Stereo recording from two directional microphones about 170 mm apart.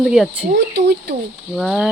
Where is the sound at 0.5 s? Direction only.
85° right.